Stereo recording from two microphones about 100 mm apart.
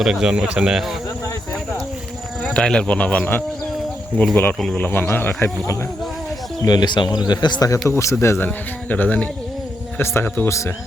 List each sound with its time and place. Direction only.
0.0 s speech: 5° right (ahead or behind)
2.4 s speech: 10° left (ahead or behind)
4.6 s speech: 5° left (ahead or behind)
4.9 s speech: 20° left (ahead or behind)
6.6 s speech: 45° left (ahead or behind)
7.7 s speech: 30° left (ahead or behind)